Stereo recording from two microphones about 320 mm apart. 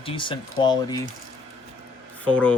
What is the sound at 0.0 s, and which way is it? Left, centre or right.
Speech, centre.